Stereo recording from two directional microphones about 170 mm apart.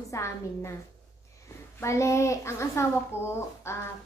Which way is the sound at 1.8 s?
15° left (ahead or behind).